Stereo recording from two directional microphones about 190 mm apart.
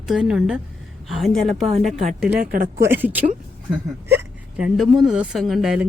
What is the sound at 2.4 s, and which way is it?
Speech, 45° right (ahead or behind).